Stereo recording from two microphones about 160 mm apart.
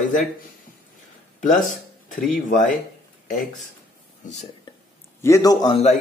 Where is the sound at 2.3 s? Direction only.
55° left (ahead or behind).